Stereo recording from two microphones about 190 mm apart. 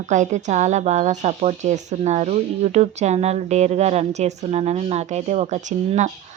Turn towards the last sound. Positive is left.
turn(degrees=-35)  # may be behind; listen again after turning